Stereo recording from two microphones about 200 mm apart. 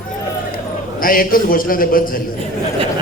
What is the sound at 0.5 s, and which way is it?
A man's voice, 45° left (ahead or behind).